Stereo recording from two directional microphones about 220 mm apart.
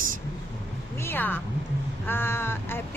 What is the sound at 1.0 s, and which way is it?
A woman's voice, 10° left (ahead or behind).